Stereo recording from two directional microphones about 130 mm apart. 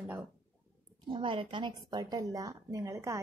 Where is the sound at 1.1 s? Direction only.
40° right (ahead or behind).